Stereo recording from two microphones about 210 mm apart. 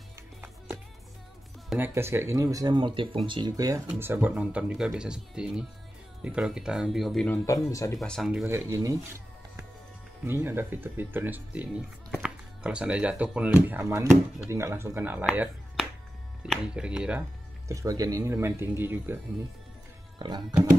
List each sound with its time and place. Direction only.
1.7 s speech: 10° right (ahead or behind)
7.4 s speech: 15° left (ahead or behind)
8.0 s speech: centre (ahead or behind)
8.5 s speech: 15° right (ahead or behind)
17.6 s speech: 15° right (ahead or behind)
20.2 s speech: 20° right (ahead or behind)